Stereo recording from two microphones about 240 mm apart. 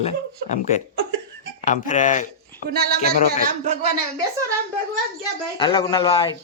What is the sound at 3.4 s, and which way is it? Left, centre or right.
Speech, right.